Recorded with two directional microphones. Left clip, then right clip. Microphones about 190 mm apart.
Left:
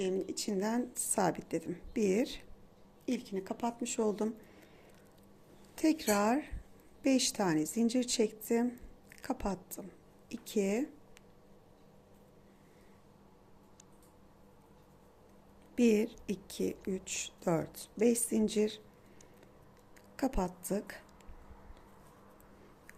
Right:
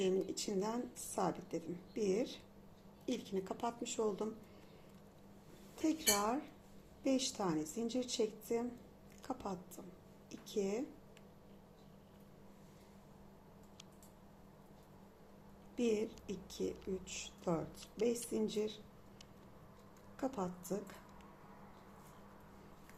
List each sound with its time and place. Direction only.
0.0 s a woman's voice: 25° left (ahead or behind); by 2.4 s 40° left (ahead or behind)
3.1 s a woman's voice: 30° left (ahead or behind)
5.7 s a woman's voice: 40° left (ahead or behind)
15.7 s speech: 40° left (ahead or behind)
20.1 s speech: 45° left (ahead or behind)